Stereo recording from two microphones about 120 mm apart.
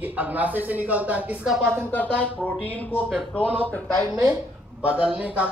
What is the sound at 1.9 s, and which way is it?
Speech, 15° left (ahead or behind).